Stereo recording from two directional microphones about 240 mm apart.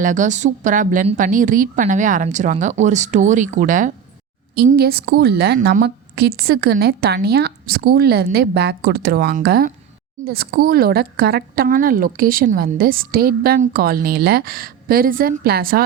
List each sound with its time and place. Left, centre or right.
0.0 s a woman's voice: right